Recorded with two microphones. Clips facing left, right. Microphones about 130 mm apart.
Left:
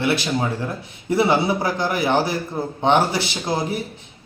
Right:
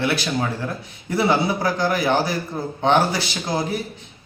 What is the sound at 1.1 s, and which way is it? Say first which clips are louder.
A man's voice: left 2 dB; 25° left (ahead or behind).